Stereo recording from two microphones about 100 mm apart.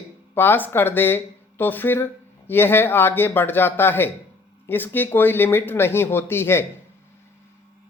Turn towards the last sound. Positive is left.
turn(degrees=25)  # may be behind; listen again after turning